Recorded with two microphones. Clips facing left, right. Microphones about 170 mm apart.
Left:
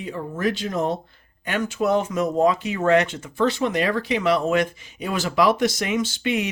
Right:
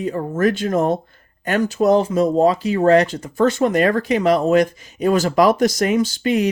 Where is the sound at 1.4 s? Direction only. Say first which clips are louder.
Right 6 dB; 40° right (ahead or behind).